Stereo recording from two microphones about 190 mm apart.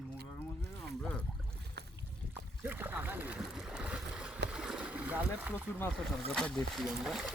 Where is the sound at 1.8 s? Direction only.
60° right (ahead or behind).